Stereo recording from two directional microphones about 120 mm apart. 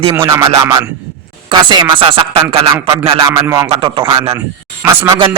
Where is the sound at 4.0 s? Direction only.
30° right (ahead or behind).